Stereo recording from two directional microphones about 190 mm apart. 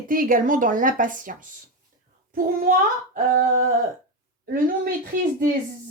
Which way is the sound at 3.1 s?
45° right (ahead or behind).